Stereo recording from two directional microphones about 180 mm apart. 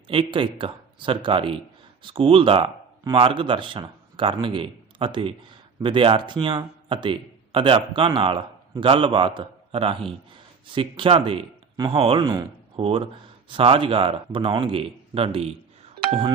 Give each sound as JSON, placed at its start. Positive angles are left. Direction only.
{"t": 0.1, "sound": "speech", "side_deg": -30}
{"t": 16.0, "sound": "music", "side_deg": -30}